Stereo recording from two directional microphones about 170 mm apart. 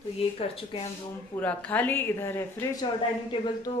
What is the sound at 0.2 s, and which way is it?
Speech, 35° left (ahead or behind).